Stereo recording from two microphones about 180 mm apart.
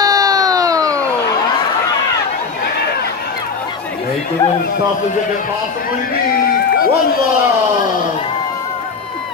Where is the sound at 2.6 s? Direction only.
60° left (ahead or behind).